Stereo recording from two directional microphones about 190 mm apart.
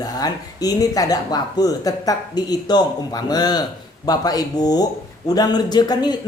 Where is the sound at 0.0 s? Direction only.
20° left (ahead or behind).